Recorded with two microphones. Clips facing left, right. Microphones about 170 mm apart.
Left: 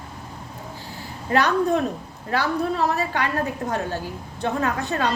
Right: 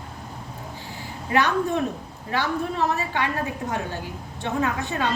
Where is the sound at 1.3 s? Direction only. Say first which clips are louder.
Left 2 dB; 40° left (ahead or behind).